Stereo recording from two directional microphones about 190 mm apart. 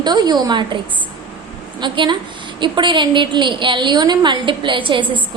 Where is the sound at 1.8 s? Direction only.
25° right (ahead or behind).